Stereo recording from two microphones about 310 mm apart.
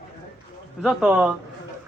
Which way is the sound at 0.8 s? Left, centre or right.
Centre.